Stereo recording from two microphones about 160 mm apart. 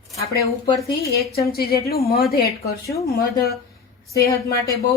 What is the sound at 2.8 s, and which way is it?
Speech, 20° left (ahead or behind).